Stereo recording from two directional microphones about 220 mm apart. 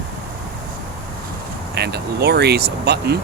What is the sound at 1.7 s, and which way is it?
Speech, 45° right (ahead or behind).